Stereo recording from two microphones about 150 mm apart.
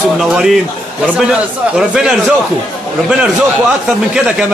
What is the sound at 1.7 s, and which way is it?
Speech, 5° right (ahead or behind).